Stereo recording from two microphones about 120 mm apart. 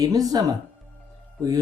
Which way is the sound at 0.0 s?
30° right (ahead or behind).